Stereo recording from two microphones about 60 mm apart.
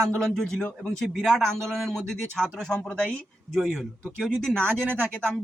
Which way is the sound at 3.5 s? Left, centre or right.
Centre.